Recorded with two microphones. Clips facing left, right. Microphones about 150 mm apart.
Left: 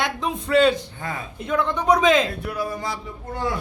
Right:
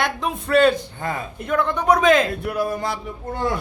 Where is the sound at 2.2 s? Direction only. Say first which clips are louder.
Right 4 dB; 55° right (ahead or behind).